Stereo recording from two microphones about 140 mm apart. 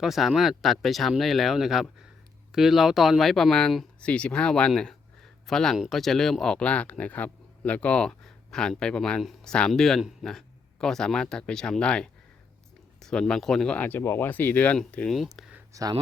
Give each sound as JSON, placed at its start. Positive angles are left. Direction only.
{"t": 0.0, "sound": "speech", "side_deg": 0}
{"t": 15.7, "sound": "speech", "side_deg": -25}